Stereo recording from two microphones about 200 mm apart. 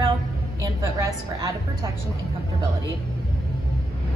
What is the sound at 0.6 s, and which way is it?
Speech, 15° right (ahead or behind).